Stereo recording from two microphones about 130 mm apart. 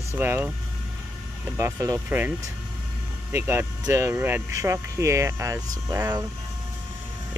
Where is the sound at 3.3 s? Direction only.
20° right (ahead or behind).